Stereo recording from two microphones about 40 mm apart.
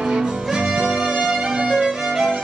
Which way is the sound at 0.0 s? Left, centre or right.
Centre.